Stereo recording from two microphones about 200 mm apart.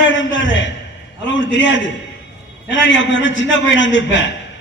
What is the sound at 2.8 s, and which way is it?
A man's voice, 65° left (ahead or behind).